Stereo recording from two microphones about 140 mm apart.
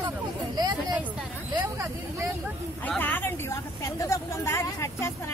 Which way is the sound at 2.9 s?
15° left (ahead or behind).